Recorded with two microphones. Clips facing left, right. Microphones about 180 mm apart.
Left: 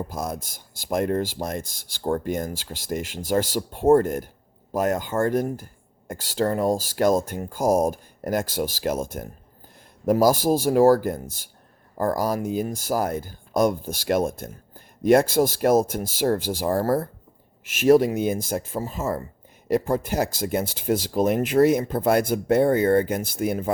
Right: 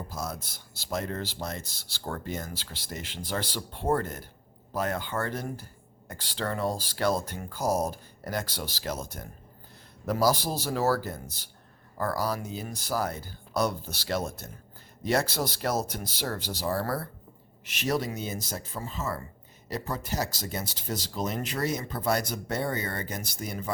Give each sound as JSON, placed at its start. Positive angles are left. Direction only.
{"t": 0.1, "sound": "speech", "side_deg": 50}